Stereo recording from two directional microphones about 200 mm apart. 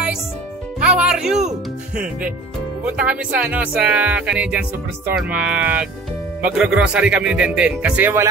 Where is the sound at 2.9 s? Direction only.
5° right (ahead or behind).